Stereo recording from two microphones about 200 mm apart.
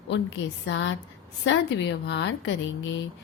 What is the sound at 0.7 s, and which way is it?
Speech, 65° left (ahead or behind).